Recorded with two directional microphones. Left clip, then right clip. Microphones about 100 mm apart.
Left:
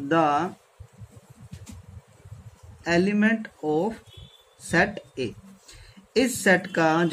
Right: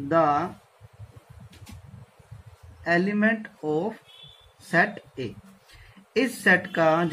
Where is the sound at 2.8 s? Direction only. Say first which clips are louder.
Even; 10° left (ahead or behind).